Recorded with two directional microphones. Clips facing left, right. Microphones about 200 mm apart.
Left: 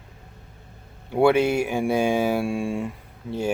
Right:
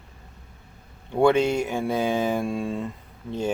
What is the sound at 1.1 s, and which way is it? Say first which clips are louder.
Speech: left 1 dB; 10° left (ahead or behind).